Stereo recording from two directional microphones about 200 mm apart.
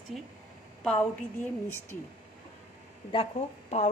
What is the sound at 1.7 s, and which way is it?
Speech, 10° left (ahead or behind).